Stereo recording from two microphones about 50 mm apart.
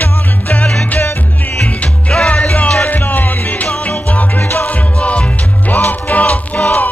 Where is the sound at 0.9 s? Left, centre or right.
Left.